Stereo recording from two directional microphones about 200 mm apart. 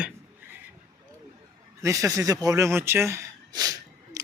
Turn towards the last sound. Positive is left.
turn(degrees=-20)  # may be behind; listen again after turning